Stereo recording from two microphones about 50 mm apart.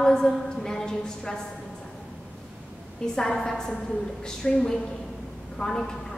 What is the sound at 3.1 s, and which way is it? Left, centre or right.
A woman's voice, centre.